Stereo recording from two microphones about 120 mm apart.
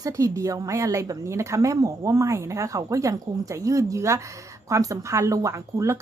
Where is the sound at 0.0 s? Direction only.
25° right (ahead or behind).